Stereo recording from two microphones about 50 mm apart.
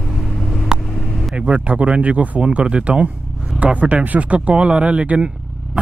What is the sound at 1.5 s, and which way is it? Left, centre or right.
Speech, right.